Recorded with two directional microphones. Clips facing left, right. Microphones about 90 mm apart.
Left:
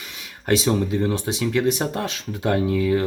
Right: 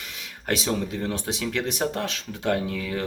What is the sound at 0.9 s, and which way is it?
Speech, centre (ahead or behind).